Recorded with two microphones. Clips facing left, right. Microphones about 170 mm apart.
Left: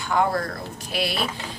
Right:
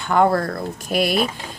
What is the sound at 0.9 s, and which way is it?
Speech, 50° right (ahead or behind).